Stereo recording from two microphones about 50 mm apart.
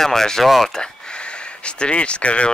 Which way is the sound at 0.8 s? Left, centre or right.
Centre.